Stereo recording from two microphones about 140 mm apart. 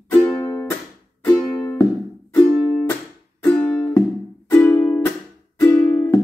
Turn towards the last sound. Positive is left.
turn(degrees=15)  # may be behind; listen again after turning